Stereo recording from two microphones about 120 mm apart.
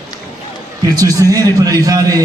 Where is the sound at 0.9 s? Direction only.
30° right (ahead or behind).